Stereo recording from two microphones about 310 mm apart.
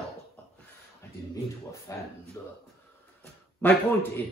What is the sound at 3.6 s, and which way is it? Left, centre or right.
Speech, centre.